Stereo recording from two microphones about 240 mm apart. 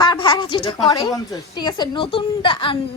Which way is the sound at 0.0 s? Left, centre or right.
Centre.